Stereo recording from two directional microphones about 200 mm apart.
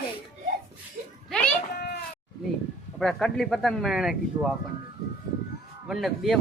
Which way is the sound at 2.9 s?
Centre (ahead or behind).